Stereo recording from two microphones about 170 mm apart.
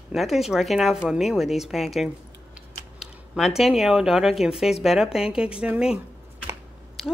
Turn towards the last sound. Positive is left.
turn(degrees=0)  # may be behind; listen again after turning